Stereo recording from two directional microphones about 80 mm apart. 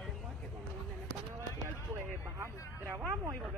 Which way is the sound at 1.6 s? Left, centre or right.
Right.